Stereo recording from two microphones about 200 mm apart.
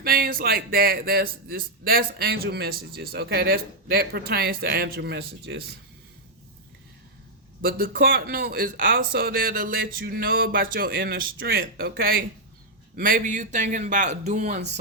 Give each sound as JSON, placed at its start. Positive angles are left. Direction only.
{"t": 0.0, "sound": "a man's voice", "side_deg": -45}
{"t": 7.6, "sound": "a man's voice", "side_deg": -45}